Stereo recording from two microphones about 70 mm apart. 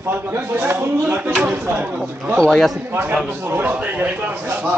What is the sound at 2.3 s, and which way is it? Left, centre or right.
Speech, centre.